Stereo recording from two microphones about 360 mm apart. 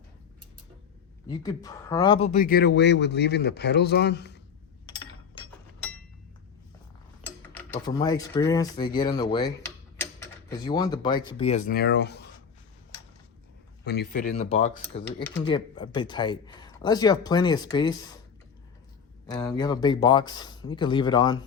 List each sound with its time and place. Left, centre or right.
1.3 s speech: centre
2.3 s a man's voice: left
7.9 s speech: centre
10.7 s speech: centre; by 12.2 s left
13.8 s a man's voice: left; by 18.2 s centre
19.3 s speech: centre